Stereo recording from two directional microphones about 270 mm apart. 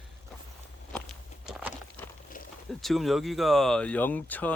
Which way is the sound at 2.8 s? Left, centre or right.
Centre.